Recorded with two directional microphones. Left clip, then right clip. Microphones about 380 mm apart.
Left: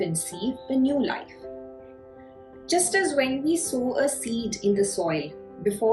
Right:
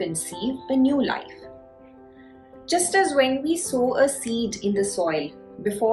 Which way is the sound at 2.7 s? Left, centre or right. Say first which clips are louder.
Right 3 dB; centre.